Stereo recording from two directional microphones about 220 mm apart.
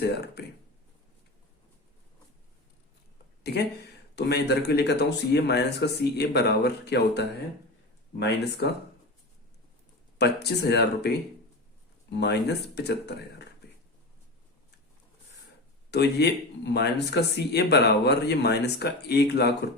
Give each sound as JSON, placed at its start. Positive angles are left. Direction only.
{"t": 0.0, "sound": "speech", "side_deg": 50}
{"t": 3.4, "sound": "speech", "side_deg": 45}
{"t": 10.2, "sound": "speech", "side_deg": 50}
{"t": 12.1, "sound": "speech", "side_deg": 50}
{"t": 15.9, "sound": "speech", "side_deg": 50}